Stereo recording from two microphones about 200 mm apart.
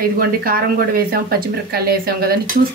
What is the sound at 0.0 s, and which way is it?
Speech, 50° right (ahead or behind).